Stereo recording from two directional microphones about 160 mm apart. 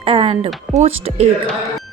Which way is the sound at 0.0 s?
35° right (ahead or behind).